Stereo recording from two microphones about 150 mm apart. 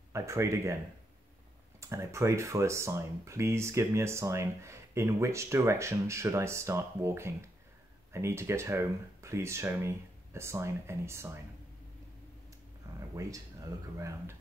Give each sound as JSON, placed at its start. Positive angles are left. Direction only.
{"t": 0.1, "sound": "speech", "side_deg": -20}
{"t": 1.8, "sound": "speech", "side_deg": -20}
{"t": 13.1, "sound": "speech", "side_deg": -20}